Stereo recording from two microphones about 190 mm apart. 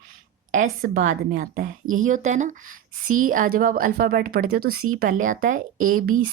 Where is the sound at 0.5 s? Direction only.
40° right (ahead or behind).